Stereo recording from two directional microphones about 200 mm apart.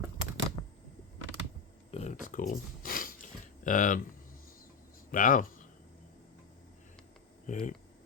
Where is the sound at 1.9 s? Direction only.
35° left (ahead or behind).